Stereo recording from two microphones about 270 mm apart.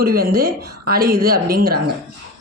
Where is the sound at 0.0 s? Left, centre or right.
Right.